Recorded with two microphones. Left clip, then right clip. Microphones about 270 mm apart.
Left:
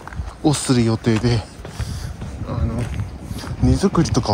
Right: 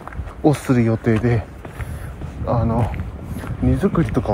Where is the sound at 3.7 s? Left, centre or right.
Centre.